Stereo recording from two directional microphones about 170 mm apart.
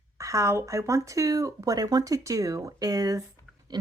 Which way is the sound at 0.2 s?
20° right (ahead or behind).